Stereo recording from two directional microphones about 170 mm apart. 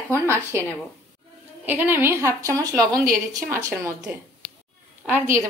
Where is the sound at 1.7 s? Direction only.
10° right (ahead or behind).